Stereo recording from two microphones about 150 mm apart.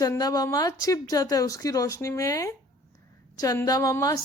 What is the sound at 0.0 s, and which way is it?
A woman's voice, 25° left (ahead or behind).